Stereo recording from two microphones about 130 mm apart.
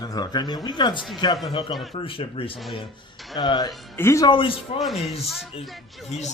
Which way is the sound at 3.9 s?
20° left (ahead or behind).